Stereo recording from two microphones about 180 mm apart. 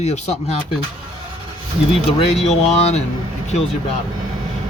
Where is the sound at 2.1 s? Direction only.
30° left (ahead or behind).